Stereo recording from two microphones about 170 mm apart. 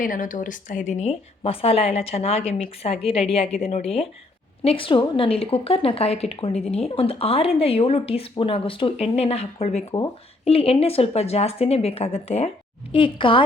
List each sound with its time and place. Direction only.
0.0 s a woman's voice: 50° left (ahead or behind); by 13.4 s 30° left (ahead or behind)